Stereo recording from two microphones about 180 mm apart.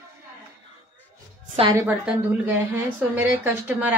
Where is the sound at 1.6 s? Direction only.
25° right (ahead or behind).